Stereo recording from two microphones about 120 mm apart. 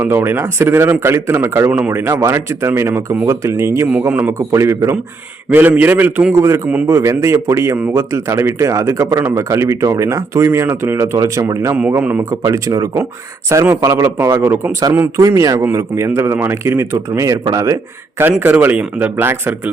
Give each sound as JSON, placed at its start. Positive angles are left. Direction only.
{"t": 0.0, "sound": "speech", "side_deg": -20}
{"t": 3.8, "sound": "speech", "side_deg": -10}
{"t": 11.9, "sound": "speech", "side_deg": -15}
{"t": 12.3, "sound": "speech", "side_deg": -25}
{"t": 18.2, "sound": "speech", "side_deg": -15}